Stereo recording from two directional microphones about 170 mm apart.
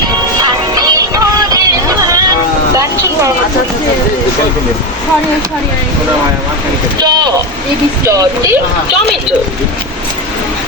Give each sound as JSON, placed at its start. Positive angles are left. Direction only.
{"t": 0.8, "sound": "music", "side_deg": -20}
{"t": 2.7, "sound": "a sound", "side_deg": -20}
{"t": 7.0, "sound": "speech", "side_deg": -25}